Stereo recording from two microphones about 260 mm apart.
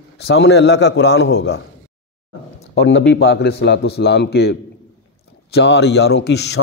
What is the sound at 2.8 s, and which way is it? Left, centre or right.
A man's voice, left.